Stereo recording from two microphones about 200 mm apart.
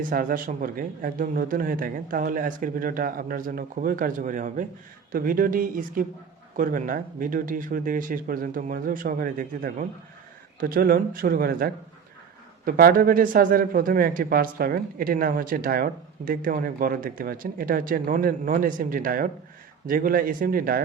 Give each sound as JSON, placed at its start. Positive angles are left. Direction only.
{"t": 0.0, "sound": "a man's voice", "side_deg": -45}